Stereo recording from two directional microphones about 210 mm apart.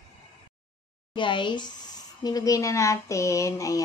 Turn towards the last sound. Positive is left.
turn(degrees=15)  # may be behind; listen again after turning